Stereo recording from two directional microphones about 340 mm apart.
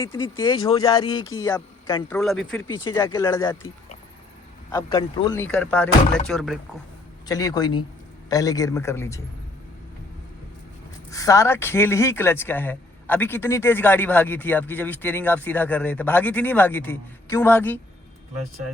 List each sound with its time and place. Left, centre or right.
0.0 s a man's voice: centre
2.1 s a man's voice: centre
11.1 s speech: centre